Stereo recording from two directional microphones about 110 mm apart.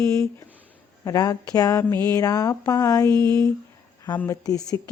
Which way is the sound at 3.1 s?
45° right (ahead or behind).